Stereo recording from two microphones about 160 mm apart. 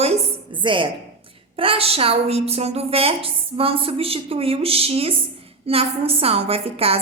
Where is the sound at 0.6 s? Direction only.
30° right (ahead or behind).